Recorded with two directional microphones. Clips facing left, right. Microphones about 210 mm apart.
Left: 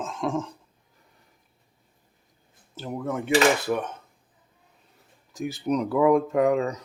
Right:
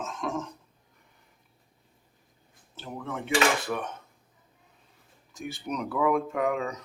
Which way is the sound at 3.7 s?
25° left (ahead or behind).